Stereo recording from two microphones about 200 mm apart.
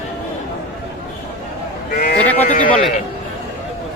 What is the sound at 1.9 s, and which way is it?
Sheep, 50° left (ahead or behind).